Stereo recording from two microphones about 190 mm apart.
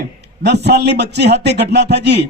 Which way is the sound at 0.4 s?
60° right (ahead or behind).